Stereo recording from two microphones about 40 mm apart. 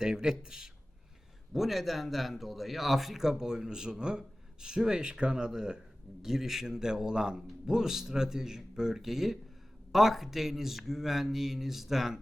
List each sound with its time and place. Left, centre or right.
0.0 s speech: centre
1.5 s a man's voice: centre
6.2 s a man's voice: centre